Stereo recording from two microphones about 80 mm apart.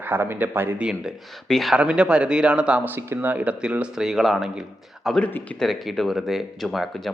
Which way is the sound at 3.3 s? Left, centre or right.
Centre.